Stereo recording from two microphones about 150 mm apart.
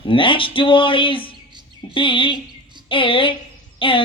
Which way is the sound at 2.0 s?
35° left (ahead or behind).